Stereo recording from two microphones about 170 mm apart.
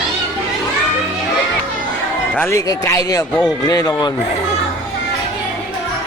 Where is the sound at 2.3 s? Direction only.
15° left (ahead or behind).